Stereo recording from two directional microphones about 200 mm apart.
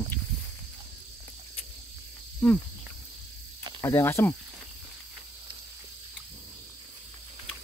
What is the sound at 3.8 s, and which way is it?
Speech, 15° left (ahead or behind).